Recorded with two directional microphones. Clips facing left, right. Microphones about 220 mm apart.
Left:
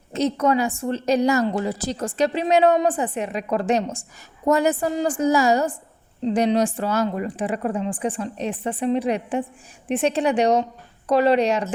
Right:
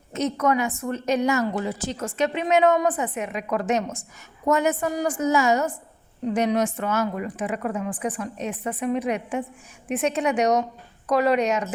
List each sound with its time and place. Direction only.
0.1 s a woman's voice: 30° left (ahead or behind)